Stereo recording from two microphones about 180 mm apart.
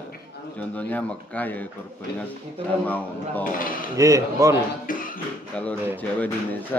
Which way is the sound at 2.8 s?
10° left (ahead or behind).